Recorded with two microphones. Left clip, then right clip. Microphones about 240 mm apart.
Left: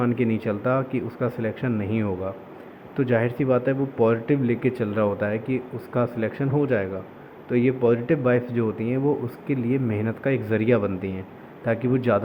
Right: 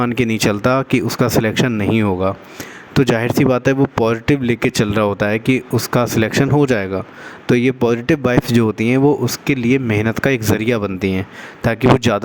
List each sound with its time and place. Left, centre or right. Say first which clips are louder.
0.0 s speech: right 7 dB; right